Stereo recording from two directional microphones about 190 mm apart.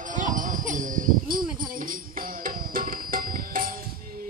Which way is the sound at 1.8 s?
45° right (ahead or behind).